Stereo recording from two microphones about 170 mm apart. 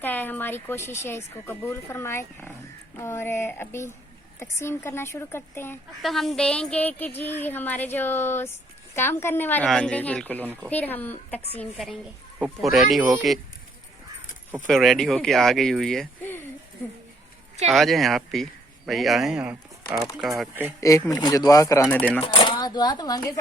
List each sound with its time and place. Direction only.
0.0 s speech: 10° left (ahead or behind)
6.0 s speech: centre (ahead or behind)
10.4 s speech: 10° right (ahead or behind)
10.7 s speech: 10° left (ahead or behind)
14.7 s speech: centre (ahead or behind)
17.7 s speech: centre (ahead or behind)
21.1 s speech: 20° left (ahead or behind)
21.8 s speech: 10° left (ahead or behind)
22.2 s speech: 30° left (ahead or behind)